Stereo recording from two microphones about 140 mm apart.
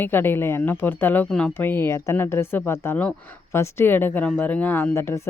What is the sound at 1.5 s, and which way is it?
Speech, 15° left (ahead or behind).